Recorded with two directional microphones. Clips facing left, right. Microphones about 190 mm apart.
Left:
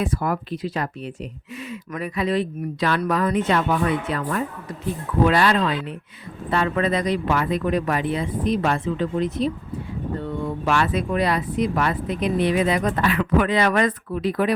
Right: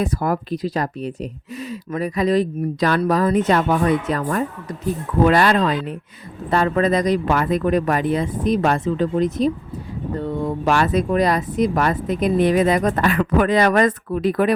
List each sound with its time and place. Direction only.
0.0 s speech: 40° right (ahead or behind)